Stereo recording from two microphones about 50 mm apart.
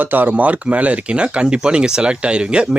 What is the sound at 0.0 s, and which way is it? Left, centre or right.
Speech, right.